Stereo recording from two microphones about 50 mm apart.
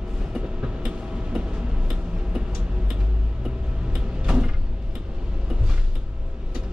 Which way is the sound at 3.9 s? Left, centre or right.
Centre.